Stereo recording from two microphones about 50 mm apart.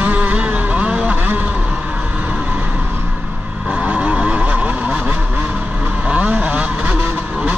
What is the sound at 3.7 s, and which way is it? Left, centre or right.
Vehicle, right.